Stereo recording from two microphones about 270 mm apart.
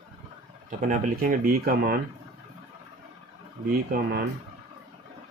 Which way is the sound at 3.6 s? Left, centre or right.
Right.